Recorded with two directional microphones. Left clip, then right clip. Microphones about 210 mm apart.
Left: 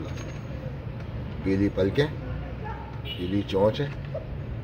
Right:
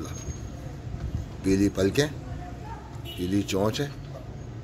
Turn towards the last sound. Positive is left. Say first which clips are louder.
# left 3 dB
turn(degrees=-35)  # may be behind; listen again after turning